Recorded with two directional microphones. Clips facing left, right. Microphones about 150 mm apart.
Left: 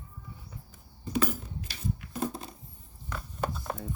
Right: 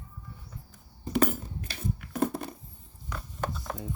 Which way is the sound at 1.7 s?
60° right (ahead or behind).